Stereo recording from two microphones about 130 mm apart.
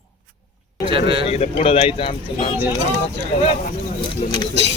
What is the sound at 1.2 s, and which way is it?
Speech, 50° left (ahead or behind).